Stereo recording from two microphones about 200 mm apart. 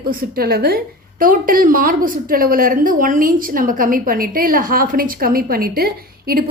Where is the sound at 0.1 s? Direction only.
45° right (ahead or behind).